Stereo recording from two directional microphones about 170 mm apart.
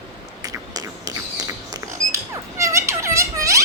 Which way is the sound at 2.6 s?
15° right (ahead or behind).